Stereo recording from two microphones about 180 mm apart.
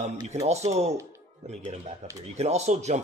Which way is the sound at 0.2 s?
40° right (ahead or behind).